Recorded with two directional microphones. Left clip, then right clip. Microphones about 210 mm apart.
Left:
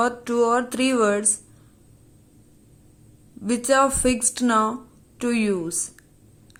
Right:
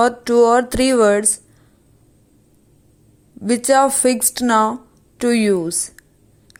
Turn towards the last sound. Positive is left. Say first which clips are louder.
# right 6 dB
turn(degrees=-20)  # may be behind; listen again after turning